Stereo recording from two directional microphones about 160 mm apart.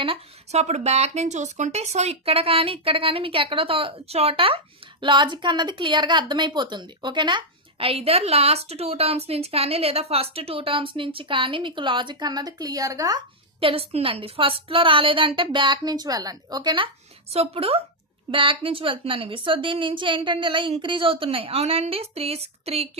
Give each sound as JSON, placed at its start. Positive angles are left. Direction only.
{"t": 0.0, "sound": "speech", "side_deg": -40}
{"t": 13.6, "sound": "speech", "side_deg": -35}